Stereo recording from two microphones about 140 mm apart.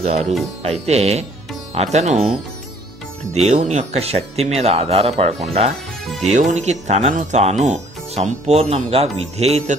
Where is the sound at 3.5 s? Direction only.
55° right (ahead or behind).